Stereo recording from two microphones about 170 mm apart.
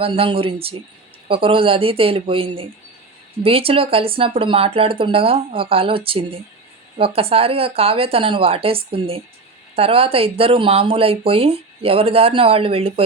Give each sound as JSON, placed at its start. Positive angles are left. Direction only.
{"t": 0.0, "sound": "speech", "side_deg": -30}